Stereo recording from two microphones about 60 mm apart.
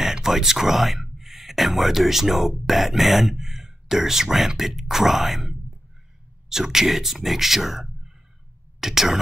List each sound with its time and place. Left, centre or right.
0.0 s speech: centre